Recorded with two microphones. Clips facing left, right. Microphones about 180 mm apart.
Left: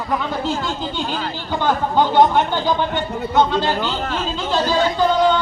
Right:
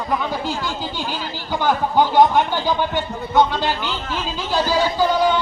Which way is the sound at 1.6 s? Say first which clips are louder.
Even; 10° right (ahead or behind).